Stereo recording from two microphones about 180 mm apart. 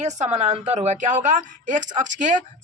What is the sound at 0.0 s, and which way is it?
A woman's voice, 40° right (ahead or behind).